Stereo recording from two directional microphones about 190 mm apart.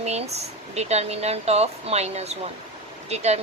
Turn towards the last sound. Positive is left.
turn(degrees=-35)  # may be behind; listen again after turning